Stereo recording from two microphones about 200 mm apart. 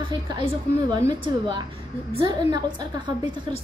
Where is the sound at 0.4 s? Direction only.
20° right (ahead or behind).